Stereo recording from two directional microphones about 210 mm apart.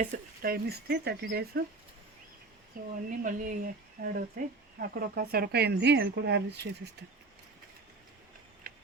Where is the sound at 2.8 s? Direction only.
40° right (ahead or behind).